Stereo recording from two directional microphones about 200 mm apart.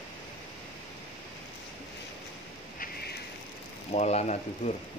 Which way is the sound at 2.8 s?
55° left (ahead or behind).